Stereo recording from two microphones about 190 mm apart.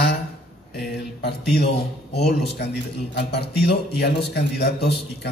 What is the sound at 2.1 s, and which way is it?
A man's voice, 60° left (ahead or behind).